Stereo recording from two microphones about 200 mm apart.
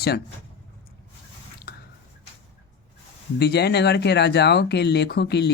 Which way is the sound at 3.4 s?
55° left (ahead or behind).